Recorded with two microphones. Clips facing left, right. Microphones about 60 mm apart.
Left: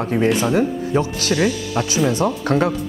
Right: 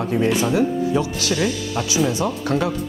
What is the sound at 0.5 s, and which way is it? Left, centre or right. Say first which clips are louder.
Speech: even; left.